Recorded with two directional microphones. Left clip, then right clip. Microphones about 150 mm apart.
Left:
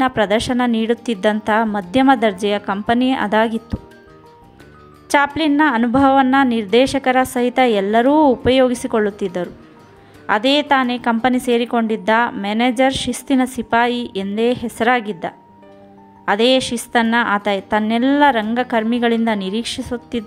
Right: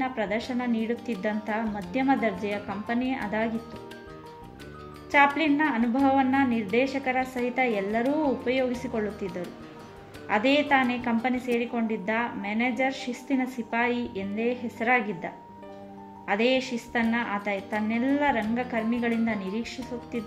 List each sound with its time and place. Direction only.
0.0 s a woman's voice: 40° left (ahead or behind)
5.4 s a woman's voice: 35° left (ahead or behind)
8.5 s a woman's voice: 40° left (ahead or behind)